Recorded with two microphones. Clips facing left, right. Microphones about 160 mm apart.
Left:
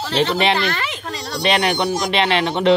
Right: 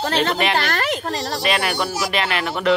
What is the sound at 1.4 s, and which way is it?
A man's voice, 25° left (ahead or behind).